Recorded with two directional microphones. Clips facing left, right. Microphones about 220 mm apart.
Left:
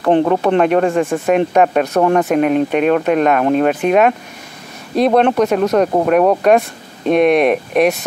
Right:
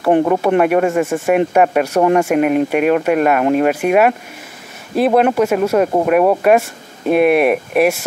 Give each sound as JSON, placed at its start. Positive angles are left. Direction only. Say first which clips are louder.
{"t": 0.0, "sound": "speech", "louder": "even", "side_deg": -10}